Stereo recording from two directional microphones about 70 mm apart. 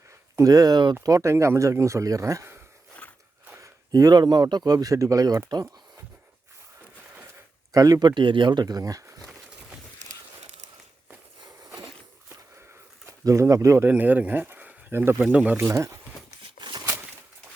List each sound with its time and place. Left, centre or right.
0.4 s speech: right
1.0 s speech: right
3.6 s speech: right
7.7 s speech: right
11.3 s walk: right
13.1 s speech: right
13.8 s speech: right
15.2 s speech: right
15.5 s speech: right